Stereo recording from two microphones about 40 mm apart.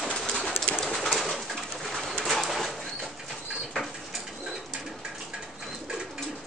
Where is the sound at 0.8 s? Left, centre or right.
Centre.